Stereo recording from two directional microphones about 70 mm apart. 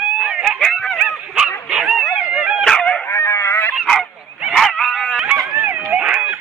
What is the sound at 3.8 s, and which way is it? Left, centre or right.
Goose, centre.